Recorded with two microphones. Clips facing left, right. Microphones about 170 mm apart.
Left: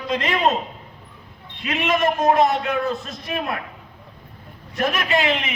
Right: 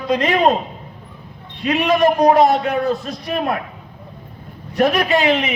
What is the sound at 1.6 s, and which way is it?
A man's voice, 45° right (ahead or behind).